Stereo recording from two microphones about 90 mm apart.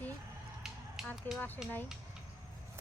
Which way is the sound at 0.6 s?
5° right (ahead or behind).